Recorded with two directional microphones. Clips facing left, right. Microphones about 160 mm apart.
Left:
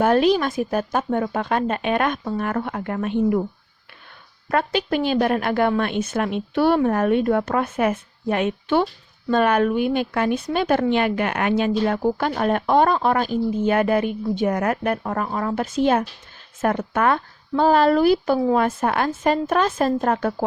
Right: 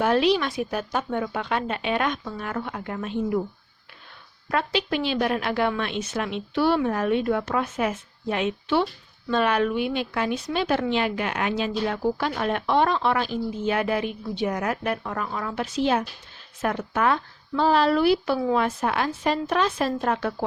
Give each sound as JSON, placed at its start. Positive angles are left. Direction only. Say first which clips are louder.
{"t": 0.0, "sound": "a woman's voice", "louder": "left 4 dB", "side_deg": 45}
{"t": 4.4, "sound": "a woman's voice", "louder": "left 4 dB", "side_deg": 50}